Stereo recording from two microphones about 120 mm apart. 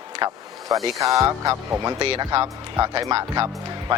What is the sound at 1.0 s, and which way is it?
Speech, 25° right (ahead or behind).